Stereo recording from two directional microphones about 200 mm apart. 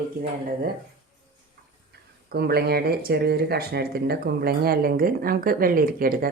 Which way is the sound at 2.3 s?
50° right (ahead or behind).